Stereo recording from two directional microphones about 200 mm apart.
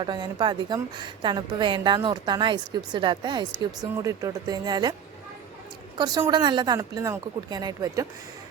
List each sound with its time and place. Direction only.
0.0 s a woman's voice: 20° right (ahead or behind)
6.0 s a woman's voice: 20° right (ahead or behind)